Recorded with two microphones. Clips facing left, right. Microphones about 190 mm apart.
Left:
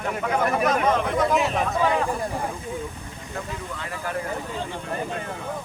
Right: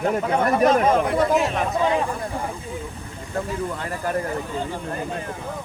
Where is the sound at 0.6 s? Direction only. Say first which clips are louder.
Right 6 dB; 30° right (ahead or behind).